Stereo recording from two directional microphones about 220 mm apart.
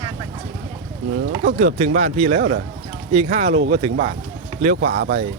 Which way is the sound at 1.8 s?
30° right (ahead or behind).